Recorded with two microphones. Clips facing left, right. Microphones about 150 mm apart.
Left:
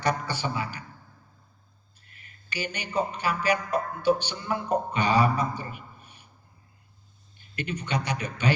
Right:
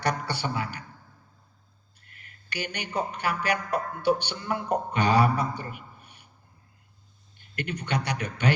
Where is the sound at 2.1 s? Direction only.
60° right (ahead or behind).